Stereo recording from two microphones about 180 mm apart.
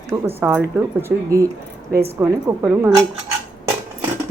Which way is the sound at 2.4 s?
10° right (ahead or behind).